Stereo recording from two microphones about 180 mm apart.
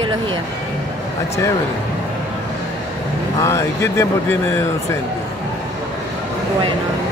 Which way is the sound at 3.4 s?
15° left (ahead or behind).